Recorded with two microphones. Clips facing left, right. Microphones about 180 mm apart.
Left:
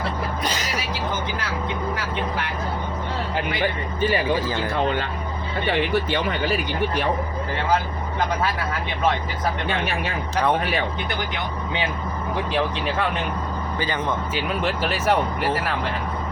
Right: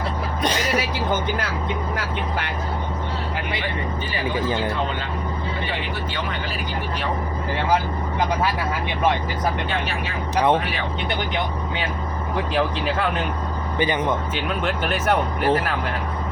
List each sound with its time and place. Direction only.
10.3 s speech: 20° right (ahead or behind)
12.5 s speech: centre (ahead or behind)
13.7 s speech: 20° right (ahead or behind)
14.3 s speech: 5° left (ahead or behind)